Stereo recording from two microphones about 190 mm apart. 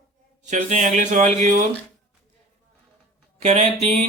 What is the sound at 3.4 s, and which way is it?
Speech, 35° right (ahead or behind).